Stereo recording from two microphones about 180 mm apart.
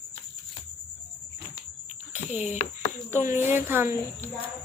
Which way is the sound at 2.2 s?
40° left (ahead or behind).